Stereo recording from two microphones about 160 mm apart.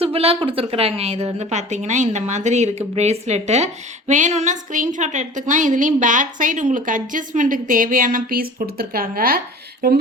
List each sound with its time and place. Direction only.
0.0 s a woman's voice: 35° right (ahead or behind); by 9.4 s 65° right (ahead or behind)